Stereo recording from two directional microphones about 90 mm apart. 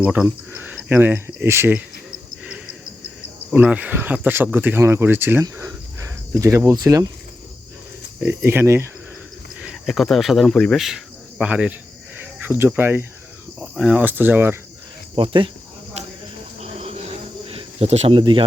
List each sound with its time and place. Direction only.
0.0 s speech: 15° right (ahead or behind)
2.0 s cricket: 10° right (ahead or behind)
3.5 s speech: 15° right (ahead or behind); by 7.1 s 40° right (ahead or behind)
8.2 s speech: 25° right (ahead or behind)
9.8 s cricket: centre (ahead or behind); by 13.1 s 25° right (ahead or behind)
13.6 s speech: 15° right (ahead or behind)
15.1 s speech: 70° right (ahead or behind)
17.4 s cricket: 90° right
18.1 s speech: 70° right (ahead or behind)